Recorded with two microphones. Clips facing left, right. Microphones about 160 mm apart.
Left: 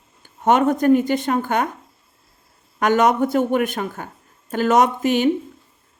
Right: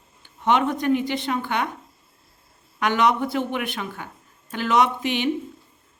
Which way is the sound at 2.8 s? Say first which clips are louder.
Left 4 dB; 45° left (ahead or behind).